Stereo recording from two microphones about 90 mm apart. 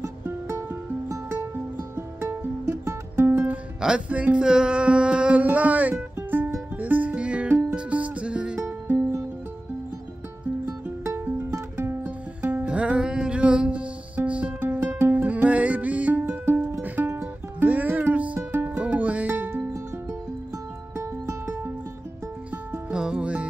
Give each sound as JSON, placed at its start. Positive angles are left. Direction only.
{"t": 0.0, "sound": "music", "side_deg": -30}
{"t": 3.4, "sound": "music", "side_deg": -10}
{"t": 8.5, "sound": "music", "side_deg": -25}
{"t": 11.1, "sound": "music", "side_deg": -25}
{"t": 14.8, "sound": "music", "side_deg": -25}
{"t": 20.9, "sound": "music", "side_deg": -30}
{"t": 22.8, "sound": "music", "side_deg": -10}